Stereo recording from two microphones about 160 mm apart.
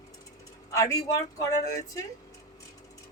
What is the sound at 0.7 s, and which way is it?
Speech, 20° left (ahead or behind).